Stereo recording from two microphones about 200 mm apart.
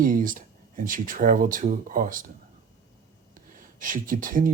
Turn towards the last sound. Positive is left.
turn(degrees=-40)  # may be behind; listen again after turning